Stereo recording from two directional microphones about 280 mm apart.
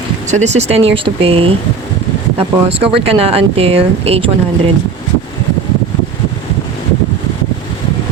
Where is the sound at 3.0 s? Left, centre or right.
Right.